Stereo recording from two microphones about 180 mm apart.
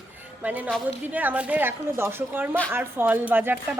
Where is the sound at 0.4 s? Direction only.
10° right (ahead or behind).